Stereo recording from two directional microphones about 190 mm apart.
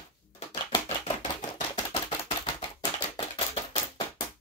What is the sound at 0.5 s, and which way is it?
Typewriter, 30° left (ahead or behind).